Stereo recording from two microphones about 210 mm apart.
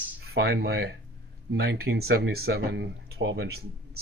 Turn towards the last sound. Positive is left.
turn(degrees=-50)  # may be behind; listen again after turning